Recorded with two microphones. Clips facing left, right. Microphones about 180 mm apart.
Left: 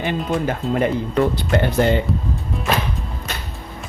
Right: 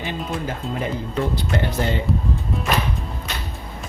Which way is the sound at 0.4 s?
65° left (ahead or behind).